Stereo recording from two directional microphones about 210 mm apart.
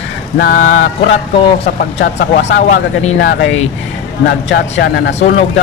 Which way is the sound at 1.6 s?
50° left (ahead or behind).